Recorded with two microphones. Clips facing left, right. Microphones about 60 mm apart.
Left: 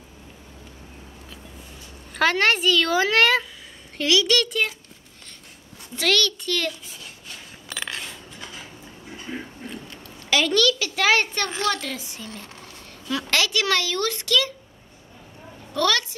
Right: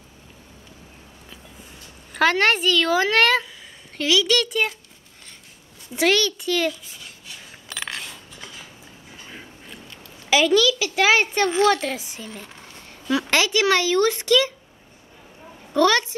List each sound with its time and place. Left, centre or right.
2.1 s a woman's voice: centre
5.9 s a child's voice: centre
9.3 s a sound: left
10.3 s a child's voice: centre
12.3 s a sound: centre
13.3 s a woman's voice: centre
15.7 s a woman's voice: right